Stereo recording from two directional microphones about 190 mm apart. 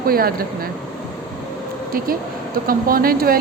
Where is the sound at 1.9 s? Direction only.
50° right (ahead or behind).